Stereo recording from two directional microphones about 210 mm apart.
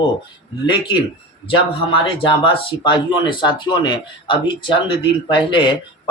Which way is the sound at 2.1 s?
25° left (ahead or behind).